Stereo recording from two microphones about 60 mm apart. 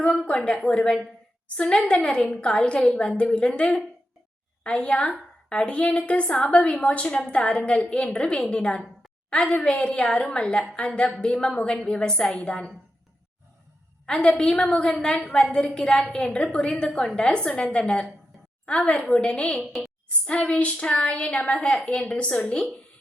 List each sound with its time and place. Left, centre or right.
0.0 s a woman's voice: centre
14.1 s a woman's voice: centre